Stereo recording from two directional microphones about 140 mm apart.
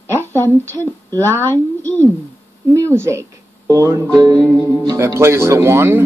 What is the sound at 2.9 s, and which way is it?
Speech, 20° right (ahead or behind).